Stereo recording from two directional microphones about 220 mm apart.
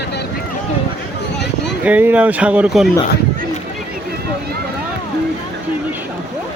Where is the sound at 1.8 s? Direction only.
5° right (ahead or behind).